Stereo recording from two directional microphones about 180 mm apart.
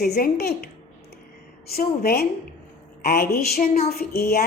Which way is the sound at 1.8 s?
60° left (ahead or behind).